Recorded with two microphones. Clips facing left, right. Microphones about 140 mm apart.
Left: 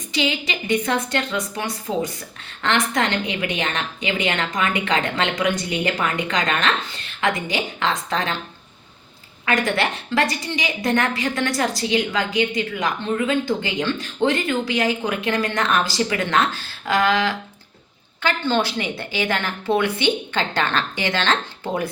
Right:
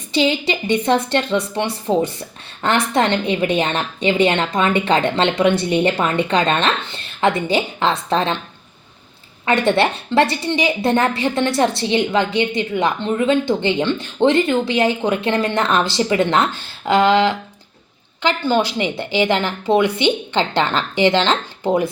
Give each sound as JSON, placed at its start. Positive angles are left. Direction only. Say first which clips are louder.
{"t": 0.1, "sound": "a woman's voice", "louder": "right 6 dB", "side_deg": -30}
{"t": 9.5, "sound": "a woman's voice", "louder": "right 5 dB", "side_deg": -30}